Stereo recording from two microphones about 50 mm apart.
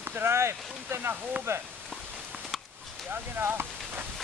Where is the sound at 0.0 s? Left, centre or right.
Right.